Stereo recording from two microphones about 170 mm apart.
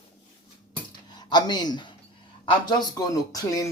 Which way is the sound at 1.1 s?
25° left (ahead or behind).